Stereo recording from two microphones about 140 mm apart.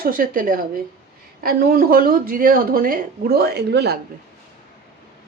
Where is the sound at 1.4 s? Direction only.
90° right.